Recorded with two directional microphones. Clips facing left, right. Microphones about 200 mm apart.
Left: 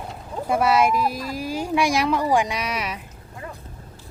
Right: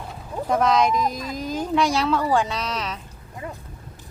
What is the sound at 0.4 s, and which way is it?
Speech, 10° left (ahead or behind).